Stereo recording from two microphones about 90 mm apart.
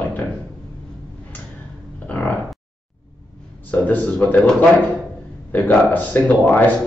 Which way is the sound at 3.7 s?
20° left (ahead or behind).